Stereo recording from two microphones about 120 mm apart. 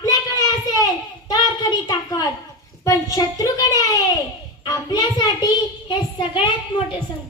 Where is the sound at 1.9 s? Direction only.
30° left (ahead or behind).